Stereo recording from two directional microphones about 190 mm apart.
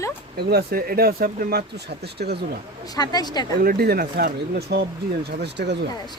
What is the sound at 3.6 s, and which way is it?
A man's voice, 50° right (ahead or behind).